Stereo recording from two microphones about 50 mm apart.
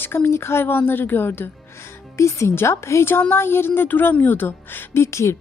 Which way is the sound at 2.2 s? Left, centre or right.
Left.